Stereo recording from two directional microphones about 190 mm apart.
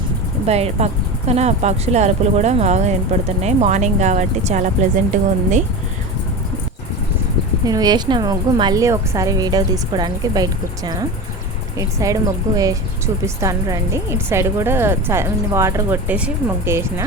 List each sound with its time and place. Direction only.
0.4 s speech: 35° right (ahead or behind)
7.6 s a woman's voice: 20° right (ahead or behind)